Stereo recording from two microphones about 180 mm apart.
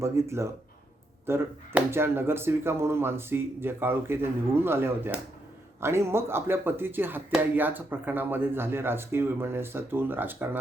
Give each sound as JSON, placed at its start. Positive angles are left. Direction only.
{"t": 0.0, "sound": "speech", "side_deg": -15}